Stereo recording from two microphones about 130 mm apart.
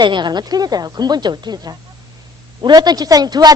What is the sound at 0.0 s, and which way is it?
Speech, 35° right (ahead or behind).